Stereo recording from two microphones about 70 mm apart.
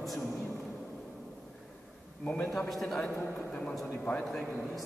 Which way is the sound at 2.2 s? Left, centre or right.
Left.